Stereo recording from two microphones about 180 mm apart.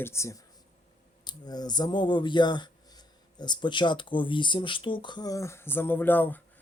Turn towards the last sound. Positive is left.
turn(degrees=10)  # may be behind; listen again after turning